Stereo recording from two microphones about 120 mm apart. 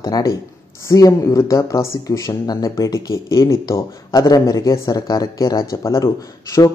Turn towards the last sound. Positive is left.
turn(degrees=30)  # may be behind; listen again after turning